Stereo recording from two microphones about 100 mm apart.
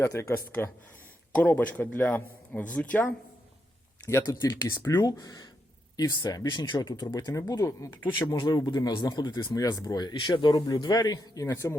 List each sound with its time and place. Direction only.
0.0 s speech: 30° left (ahead or behind)
1.3 s speech: 15° left (ahead or behind)
4.2 s speech: 40° left (ahead or behind)